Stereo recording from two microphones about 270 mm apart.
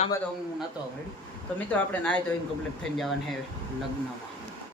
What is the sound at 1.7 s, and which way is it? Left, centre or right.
Speech, centre.